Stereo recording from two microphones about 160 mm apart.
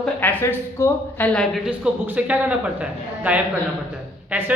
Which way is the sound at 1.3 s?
Centre (ahead or behind).